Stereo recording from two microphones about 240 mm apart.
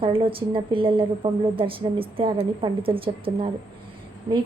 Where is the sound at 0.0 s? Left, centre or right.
Right.